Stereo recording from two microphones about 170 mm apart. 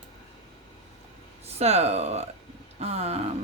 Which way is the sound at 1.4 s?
40° right (ahead or behind).